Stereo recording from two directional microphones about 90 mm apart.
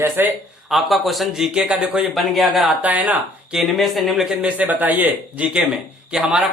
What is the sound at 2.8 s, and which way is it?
Speech, 15° right (ahead or behind).